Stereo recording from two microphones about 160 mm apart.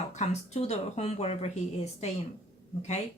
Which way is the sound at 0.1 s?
45° left (ahead or behind).